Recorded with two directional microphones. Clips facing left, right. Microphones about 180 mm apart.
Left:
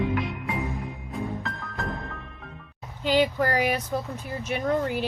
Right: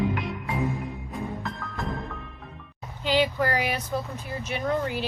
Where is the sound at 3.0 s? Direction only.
45° left (ahead or behind).